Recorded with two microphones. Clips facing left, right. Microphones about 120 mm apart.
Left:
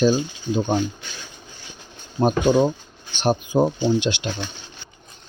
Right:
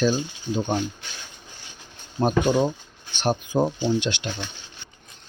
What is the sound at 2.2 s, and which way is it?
Speech, 15° left (ahead or behind).